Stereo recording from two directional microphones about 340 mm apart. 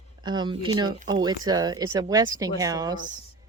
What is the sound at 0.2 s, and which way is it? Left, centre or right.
Speech, centre.